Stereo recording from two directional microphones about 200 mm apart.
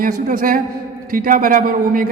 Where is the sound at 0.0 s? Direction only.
45° right (ahead or behind).